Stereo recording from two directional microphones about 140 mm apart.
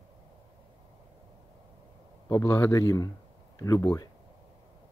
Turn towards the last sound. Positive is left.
turn(degrees=25)  # may be behind; listen again after turning